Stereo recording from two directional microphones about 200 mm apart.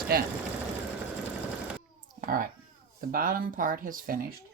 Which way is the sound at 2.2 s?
45° right (ahead or behind).